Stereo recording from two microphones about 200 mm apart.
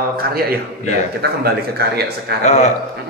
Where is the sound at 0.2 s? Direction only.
50° right (ahead or behind).